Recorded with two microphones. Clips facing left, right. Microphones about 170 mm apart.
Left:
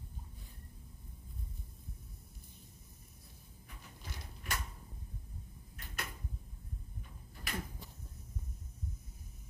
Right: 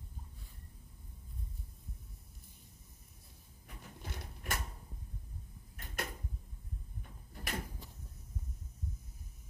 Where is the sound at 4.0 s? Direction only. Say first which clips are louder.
Right 3 dB; 55° right (ahead or behind).